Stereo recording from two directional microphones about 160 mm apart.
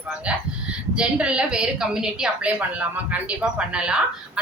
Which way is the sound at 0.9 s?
5° right (ahead or behind).